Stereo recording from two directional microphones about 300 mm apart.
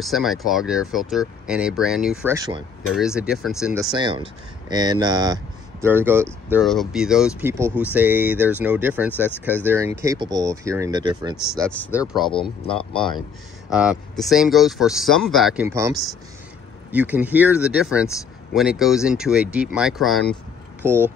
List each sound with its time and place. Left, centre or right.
0.0 s speech: centre
3.9 s speech: centre
11.7 s speech: centre
12.6 s speech: centre
13.7 s speech: centre
18.0 s speech: centre